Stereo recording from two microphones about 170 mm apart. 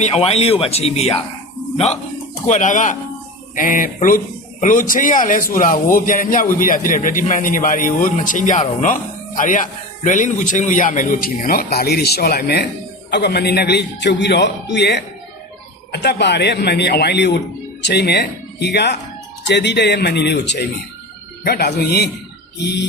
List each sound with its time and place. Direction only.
0.0 s speech: 35° left (ahead or behind)
2.5 s a man's voice: 50° left (ahead or behind); by 12.6 s 65° left (ahead or behind)
13.1 s a man's voice: 80° left
19.5 s speech: 90° left
21.4 s a man's voice: 65° left (ahead or behind)